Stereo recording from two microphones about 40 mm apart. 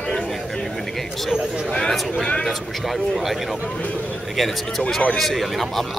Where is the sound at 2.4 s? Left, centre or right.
Centre.